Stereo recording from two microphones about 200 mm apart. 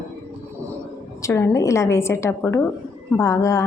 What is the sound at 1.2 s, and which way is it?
A woman's voice, 15° left (ahead or behind).